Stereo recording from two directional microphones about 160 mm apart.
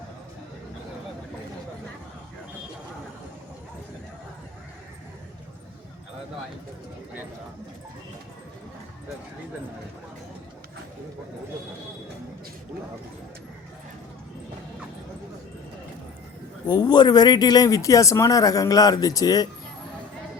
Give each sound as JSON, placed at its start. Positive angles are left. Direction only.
{"t": 16.6, "sound": "speech", "side_deg": 25}